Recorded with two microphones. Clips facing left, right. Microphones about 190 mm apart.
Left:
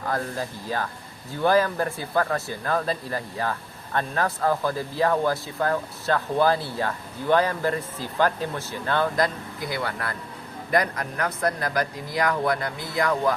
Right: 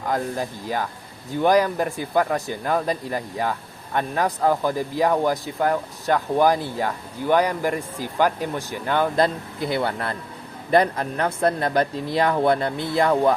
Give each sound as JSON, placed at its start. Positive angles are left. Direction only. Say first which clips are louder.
{"t": 0.1, "sound": "speech", "louder": "right 4 dB", "side_deg": -15}
{"t": 9.1, "sound": "speech", "louder": "right 4 dB", "side_deg": -25}